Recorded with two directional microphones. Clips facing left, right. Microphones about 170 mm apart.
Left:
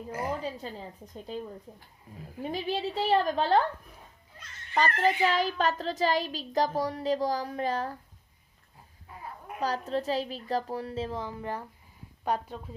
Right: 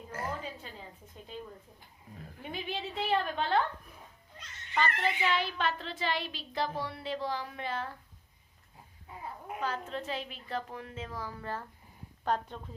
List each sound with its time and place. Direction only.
0.1 s a sound: 15° left (ahead or behind)
0.4 s a child's voice: 35° left (ahead or behind)
2.4 s a child's voice: 35° left (ahead or behind)
4.7 s a child's voice: 40° left (ahead or behind)
9.6 s a child's voice: 35° left (ahead or behind); by 12.5 s 10° left (ahead or behind)